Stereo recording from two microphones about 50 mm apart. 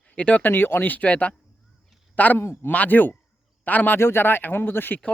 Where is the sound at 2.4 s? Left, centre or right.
Left.